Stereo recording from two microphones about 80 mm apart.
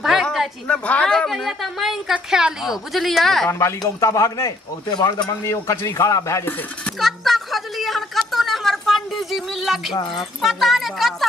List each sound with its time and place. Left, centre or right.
0.2 s a sound: centre
0.7 s a woman's voice: centre
3.4 s speech: left
5.4 s speech: left
7.0 s a sound: centre
10.4 s a woman's voice: centre